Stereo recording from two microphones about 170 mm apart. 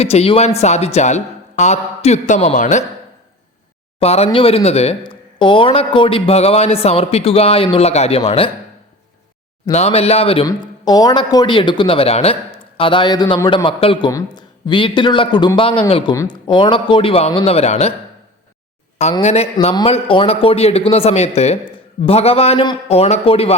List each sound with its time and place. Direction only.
0.0 s speech: 35° left (ahead or behind)
4.0 s speech: 40° left (ahead or behind)
9.7 s speech: 40° left (ahead or behind)
10.4 s speech: 25° left (ahead or behind); by 17.9 s 40° left (ahead or behind)
19.2 s speech: 40° left (ahead or behind)